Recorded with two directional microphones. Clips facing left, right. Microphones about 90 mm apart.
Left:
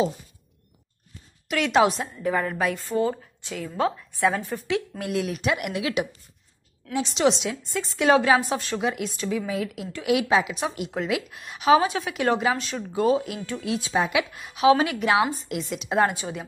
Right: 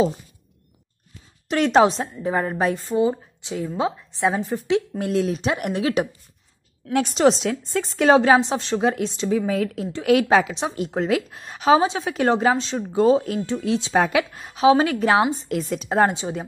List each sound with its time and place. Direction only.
1.5 s a woman's voice: 35° right (ahead or behind)
2.9 s a woman's voice: 20° right (ahead or behind); by 6.0 s 35° right (ahead or behind)
6.9 s a woman's voice: 50° right (ahead or behind); by 9.5 s 25° right (ahead or behind)
9.5 s a woman's voice: 40° right (ahead or behind)
13.9 s a woman's voice: 40° right (ahead or behind)